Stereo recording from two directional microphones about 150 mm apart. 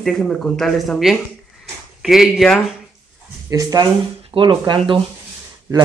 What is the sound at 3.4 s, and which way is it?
Speech, 25° right (ahead or behind).